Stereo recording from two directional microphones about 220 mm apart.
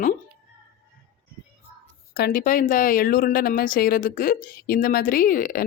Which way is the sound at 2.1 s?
40° left (ahead or behind).